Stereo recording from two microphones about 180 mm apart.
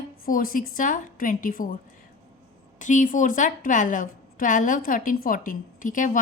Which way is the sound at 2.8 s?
45° left (ahead or behind).